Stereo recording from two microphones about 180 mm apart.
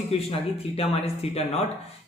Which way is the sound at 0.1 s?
35° left (ahead or behind).